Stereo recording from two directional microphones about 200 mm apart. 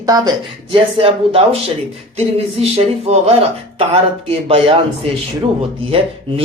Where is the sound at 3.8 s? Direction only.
30° right (ahead or behind).